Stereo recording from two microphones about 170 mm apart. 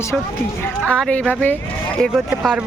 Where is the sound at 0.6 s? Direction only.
5° left (ahead or behind).